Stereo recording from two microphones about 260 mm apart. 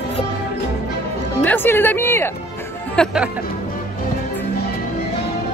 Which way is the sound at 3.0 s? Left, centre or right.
Centre.